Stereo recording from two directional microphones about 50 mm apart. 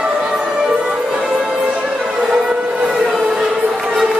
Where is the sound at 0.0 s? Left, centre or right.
Centre.